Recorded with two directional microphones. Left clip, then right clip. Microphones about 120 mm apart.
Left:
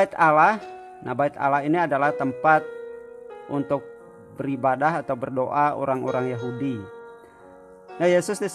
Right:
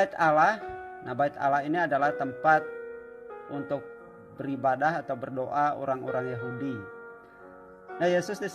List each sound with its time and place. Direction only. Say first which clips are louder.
0.0 s a man's voice: left 5 dB; 35° left (ahead or behind)
3.4 s a man's voice: left 8 dB; 40° left (ahead or behind)
8.0 s speech: left 6 dB; 50° left (ahead or behind)